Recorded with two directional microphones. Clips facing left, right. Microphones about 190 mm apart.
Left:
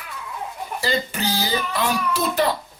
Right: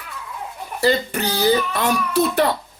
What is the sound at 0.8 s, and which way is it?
Music, 60° right (ahead or behind).